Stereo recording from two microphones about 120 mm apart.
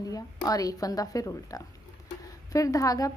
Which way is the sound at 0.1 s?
30° left (ahead or behind).